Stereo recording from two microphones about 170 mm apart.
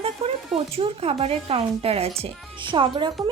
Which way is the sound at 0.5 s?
35° right (ahead or behind).